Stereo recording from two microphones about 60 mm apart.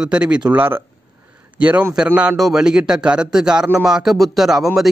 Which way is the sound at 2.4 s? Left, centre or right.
Centre.